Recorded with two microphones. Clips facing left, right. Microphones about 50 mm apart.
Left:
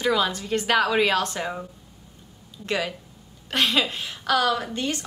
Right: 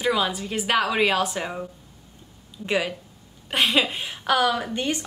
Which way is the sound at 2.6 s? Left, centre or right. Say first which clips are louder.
Right 2 dB; centre.